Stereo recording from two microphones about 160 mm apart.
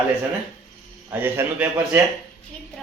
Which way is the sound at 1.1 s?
10° right (ahead or behind).